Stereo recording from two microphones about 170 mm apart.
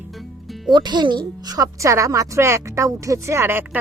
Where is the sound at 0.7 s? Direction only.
25° right (ahead or behind).